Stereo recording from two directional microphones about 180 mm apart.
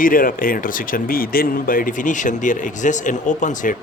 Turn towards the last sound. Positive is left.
turn(degrees=45)  # may be behind; listen again after turning